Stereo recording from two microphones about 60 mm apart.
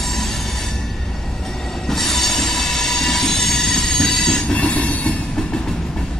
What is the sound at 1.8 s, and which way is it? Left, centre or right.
Train, centre.